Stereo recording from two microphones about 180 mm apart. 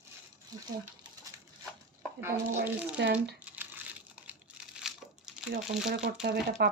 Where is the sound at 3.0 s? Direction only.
70° right (ahead or behind).